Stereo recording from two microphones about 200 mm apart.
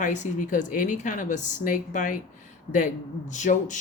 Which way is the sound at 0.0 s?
40° left (ahead or behind).